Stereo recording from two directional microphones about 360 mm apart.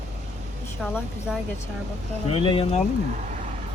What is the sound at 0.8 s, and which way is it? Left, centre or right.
Speech, centre.